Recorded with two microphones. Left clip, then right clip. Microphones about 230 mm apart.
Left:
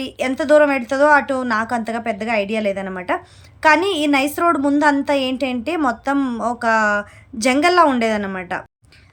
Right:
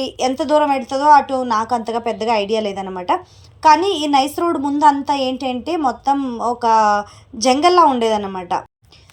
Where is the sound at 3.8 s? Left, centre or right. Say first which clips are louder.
Right 2 dB; centre.